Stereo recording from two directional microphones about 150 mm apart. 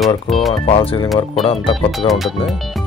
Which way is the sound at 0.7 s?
40° left (ahead or behind).